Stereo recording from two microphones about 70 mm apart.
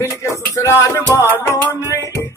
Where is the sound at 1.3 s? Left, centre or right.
Left.